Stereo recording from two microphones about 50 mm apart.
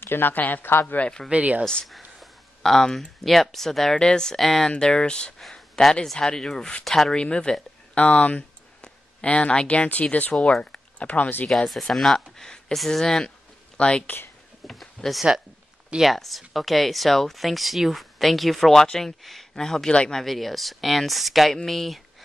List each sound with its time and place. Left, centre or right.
0.0 s speech: left
1.3 s speech: right
1.6 s speech: centre
1.9 s speech: centre
5.5 s a sound: centre
6.1 s speech: centre
7.2 s speech: centre; by 11.4 s left
11.4 s speech: centre
13.7 s speech: left
16.0 s speech: centre
19.9 s speech: left
20.2 s speech: centre